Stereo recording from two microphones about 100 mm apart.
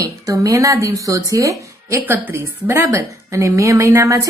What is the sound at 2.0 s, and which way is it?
A woman's voice, 20° right (ahead or behind).